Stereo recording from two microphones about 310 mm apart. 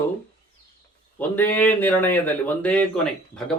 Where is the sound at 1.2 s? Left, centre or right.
Centre.